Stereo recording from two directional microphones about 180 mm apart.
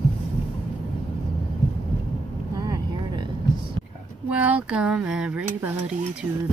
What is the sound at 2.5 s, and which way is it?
Vehicle, 20° right (ahead or behind).